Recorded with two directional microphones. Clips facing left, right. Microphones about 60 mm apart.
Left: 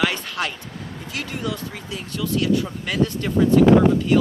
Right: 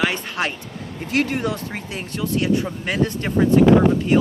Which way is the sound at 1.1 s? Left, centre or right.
Right.